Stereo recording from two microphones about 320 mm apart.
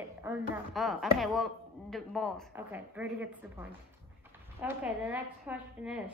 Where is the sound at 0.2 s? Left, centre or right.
Centre.